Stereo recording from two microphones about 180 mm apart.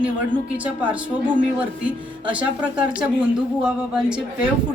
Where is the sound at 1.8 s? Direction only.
5° right (ahead or behind).